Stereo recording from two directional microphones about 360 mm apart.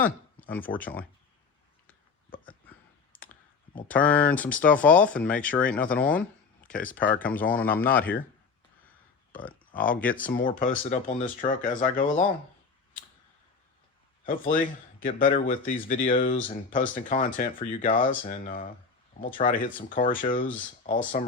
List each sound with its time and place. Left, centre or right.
0.3 s a sound: centre
0.8 s speech: centre
2.6 s clicking: centre
3.8 s speech: centre
9.4 s a sound: centre
9.9 s speech: centre
10.3 s speech: left
14.3 s speech: left